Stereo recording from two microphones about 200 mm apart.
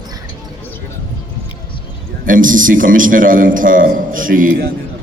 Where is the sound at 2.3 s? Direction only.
40° right (ahead or behind).